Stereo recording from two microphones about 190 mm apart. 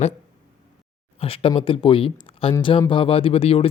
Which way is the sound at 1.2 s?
30° left (ahead or behind).